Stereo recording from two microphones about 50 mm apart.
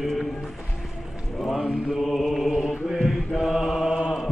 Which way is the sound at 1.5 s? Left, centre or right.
Centre.